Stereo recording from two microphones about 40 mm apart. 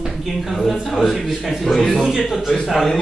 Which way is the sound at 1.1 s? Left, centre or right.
Centre.